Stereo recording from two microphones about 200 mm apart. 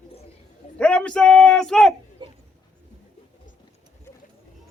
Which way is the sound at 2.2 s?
25° right (ahead or behind).